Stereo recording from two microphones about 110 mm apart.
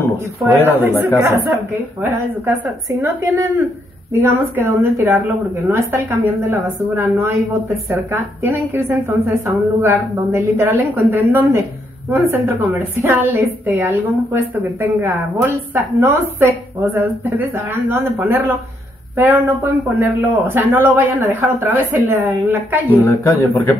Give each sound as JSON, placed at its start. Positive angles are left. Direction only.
{"t": 0.8, "sound": "a woman's voice", "side_deg": -20}
{"t": 23.0, "sound": "speech", "side_deg": 25}